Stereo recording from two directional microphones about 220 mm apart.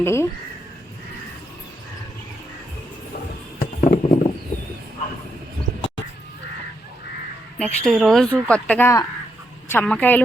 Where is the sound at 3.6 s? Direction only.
35° left (ahead or behind).